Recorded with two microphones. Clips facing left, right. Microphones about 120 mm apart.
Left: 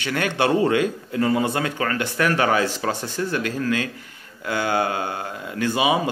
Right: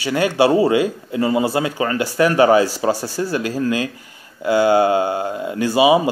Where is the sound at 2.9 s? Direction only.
35° right (ahead or behind).